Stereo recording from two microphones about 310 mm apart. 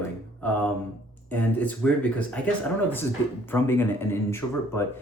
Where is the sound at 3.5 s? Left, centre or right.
Centre.